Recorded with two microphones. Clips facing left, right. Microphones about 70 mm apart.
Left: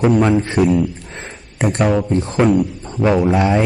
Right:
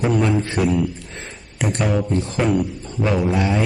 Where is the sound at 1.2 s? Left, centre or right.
Left.